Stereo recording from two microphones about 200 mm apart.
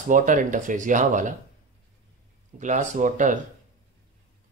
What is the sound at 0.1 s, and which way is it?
Speech, 40° right (ahead or behind).